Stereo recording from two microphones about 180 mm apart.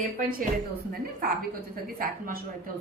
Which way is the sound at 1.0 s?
55° right (ahead or behind).